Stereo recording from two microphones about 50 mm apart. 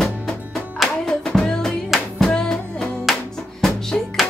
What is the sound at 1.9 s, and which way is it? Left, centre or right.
Music, centre.